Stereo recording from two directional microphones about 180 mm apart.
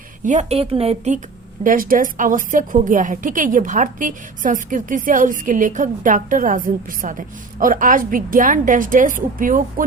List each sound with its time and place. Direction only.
0.3 s speech: 40° right (ahead or behind)
1.6 s a woman's voice: 50° right (ahead or behind)